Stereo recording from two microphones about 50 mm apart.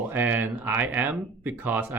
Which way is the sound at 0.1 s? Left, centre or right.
Right.